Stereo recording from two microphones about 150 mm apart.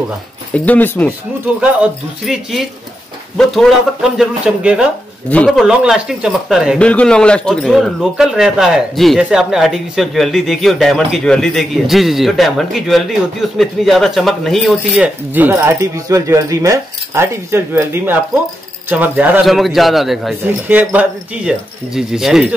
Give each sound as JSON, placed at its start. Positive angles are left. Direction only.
{"t": 0.7, "sound": "speech", "side_deg": 10}
{"t": 1.6, "sound": "speech", "side_deg": -5}
{"t": 6.8, "sound": "speech", "side_deg": 10}
{"t": 15.3, "sound": "speech", "side_deg": -15}
{"t": 20.4, "sound": "speech", "side_deg": -10}